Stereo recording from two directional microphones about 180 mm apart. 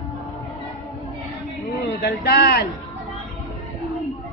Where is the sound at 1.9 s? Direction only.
65° left (ahead or behind).